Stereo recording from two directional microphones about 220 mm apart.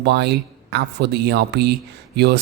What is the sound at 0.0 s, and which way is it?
Speech, 50° right (ahead or behind).